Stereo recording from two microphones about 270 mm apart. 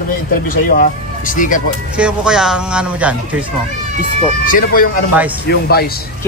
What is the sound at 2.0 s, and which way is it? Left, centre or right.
Speech, centre.